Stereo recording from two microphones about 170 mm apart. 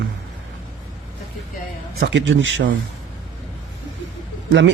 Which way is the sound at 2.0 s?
90° right.